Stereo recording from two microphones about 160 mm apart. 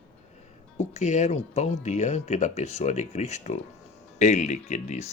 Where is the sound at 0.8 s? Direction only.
45° left (ahead or behind).